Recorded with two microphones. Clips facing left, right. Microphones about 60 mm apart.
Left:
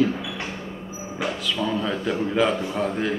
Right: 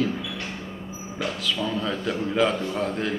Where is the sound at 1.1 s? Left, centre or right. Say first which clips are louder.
Left 1 dB; centre.